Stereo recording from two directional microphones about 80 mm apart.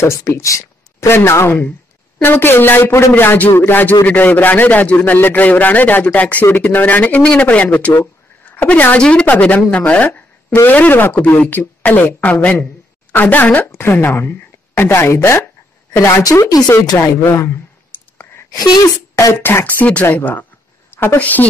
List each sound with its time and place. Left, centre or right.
0.0 s speech: left; by 10.2 s centre
10.5 s a woman's voice: left
16.3 s speech: left
17.0 s speech: left
17.9 s clicking: left
18.5 s speech: left
19.1 s a woman's voice: left